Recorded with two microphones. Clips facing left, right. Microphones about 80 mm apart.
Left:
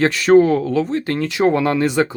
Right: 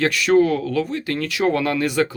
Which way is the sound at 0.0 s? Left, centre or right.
Left.